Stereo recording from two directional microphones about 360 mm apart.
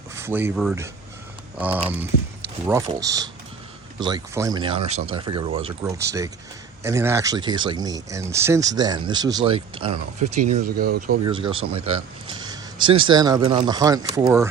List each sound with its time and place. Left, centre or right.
0.2 s speech: centre
2.1 s speech: left
2.6 s speech: centre; by 11.2 s right
11.3 s speech: centre